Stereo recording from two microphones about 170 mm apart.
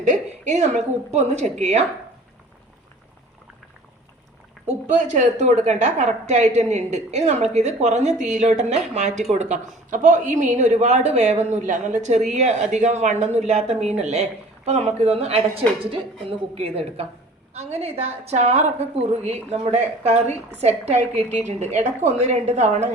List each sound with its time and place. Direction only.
0.0 s a woman's voice: 45° right (ahead or behind)
4.6 s a man's voice: 40° right (ahead or behind)